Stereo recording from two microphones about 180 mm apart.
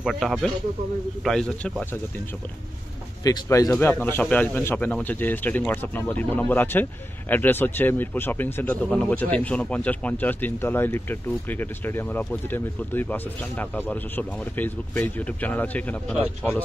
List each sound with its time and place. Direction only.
0.0 s speech: centre (ahead or behind)
3.3 s a man's voice: 20° left (ahead or behind)